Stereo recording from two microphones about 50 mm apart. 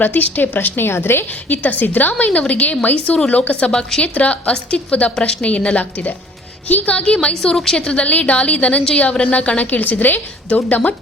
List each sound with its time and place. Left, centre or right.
0.0 s a woman's voice: left
0.9 s a woman's voice: left
1.5 s a woman's voice: left
3.7 s a woman's voice: centre
4.0 s a woman's voice: left
7.5 s a woman's voice: centre
7.8 s a woman's voice: left